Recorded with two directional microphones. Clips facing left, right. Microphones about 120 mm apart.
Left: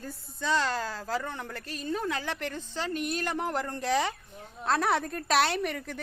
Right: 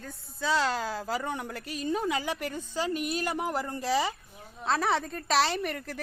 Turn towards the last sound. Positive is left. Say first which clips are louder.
# left 1 dB
turn(degrees=0)  # may be behind; listen again after turning